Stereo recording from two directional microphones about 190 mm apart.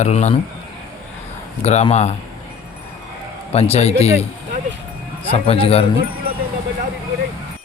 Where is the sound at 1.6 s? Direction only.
35° left (ahead or behind).